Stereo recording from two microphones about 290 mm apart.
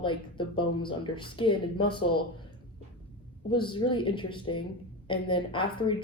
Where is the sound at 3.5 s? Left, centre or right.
Centre.